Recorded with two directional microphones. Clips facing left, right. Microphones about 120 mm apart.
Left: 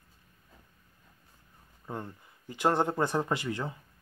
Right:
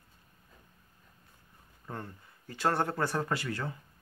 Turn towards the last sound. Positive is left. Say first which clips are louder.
# left 2 dB
turn(degrees=20)  # may be behind; listen again after turning